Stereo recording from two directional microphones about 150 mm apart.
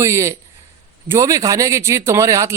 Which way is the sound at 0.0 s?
20° right (ahead or behind).